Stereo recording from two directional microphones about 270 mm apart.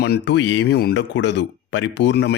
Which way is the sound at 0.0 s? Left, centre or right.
Left.